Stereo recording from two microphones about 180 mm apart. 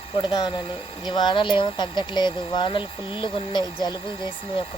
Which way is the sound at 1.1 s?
25° left (ahead or behind).